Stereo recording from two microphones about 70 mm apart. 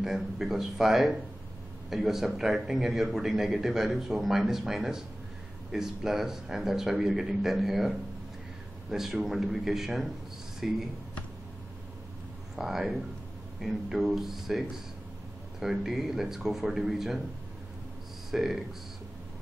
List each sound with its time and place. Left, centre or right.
0.0 s a man's voice: centre
8.9 s a man's voice: centre
12.5 s a man's voice: centre
18.3 s a man's voice: centre